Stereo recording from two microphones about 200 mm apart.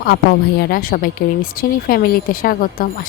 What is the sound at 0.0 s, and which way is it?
A woman's voice, 50° left (ahead or behind).